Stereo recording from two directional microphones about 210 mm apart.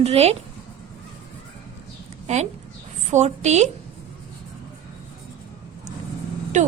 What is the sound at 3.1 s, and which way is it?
Speech, 35° right (ahead or behind).